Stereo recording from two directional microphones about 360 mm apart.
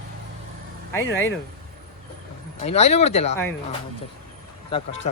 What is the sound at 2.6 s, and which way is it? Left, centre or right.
Speech, centre.